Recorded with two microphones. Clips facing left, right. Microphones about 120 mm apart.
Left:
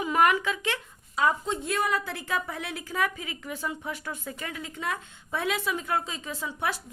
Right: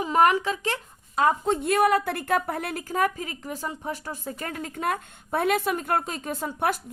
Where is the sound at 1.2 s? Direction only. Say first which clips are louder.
Right 4 dB; 55° right (ahead or behind).